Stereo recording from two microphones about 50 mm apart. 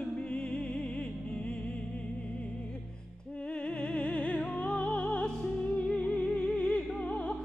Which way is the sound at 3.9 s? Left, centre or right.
Left.